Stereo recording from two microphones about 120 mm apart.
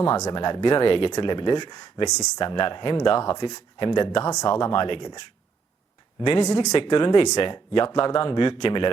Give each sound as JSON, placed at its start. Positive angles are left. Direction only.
{"t": 0.2, "sound": "speech", "side_deg": 40}
{"t": 2.4, "sound": "speech", "side_deg": 45}
{"t": 4.3, "sound": "speech", "side_deg": 30}
{"t": 4.6, "sound": "speech", "side_deg": 45}
{"t": 6.4, "sound": "speech", "side_deg": 30}
{"t": 6.7, "sound": "speech", "side_deg": 40}